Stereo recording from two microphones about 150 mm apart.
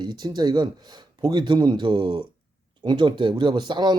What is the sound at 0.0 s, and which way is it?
Speech, 30° right (ahead or behind).